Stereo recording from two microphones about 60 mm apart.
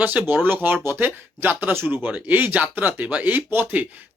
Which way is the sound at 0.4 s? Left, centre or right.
Right.